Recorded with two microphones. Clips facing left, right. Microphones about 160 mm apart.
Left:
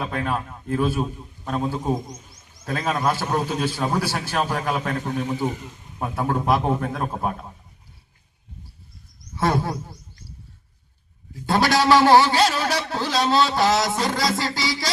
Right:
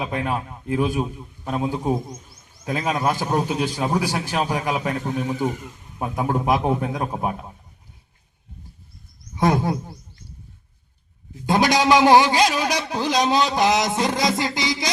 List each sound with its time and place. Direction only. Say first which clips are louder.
0.0 s a man's voice: right 1 dB; 10° right (ahead or behind)
9.3 s speech: right 3 dB; 15° right (ahead or behind)
11.4 s a man's voice: right 1 dB; 15° right (ahead or behind)